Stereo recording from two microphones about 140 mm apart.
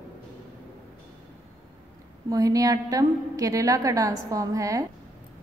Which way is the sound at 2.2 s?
25° right (ahead or behind).